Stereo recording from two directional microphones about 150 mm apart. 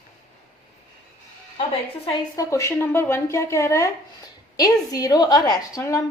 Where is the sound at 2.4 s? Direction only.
20° left (ahead or behind).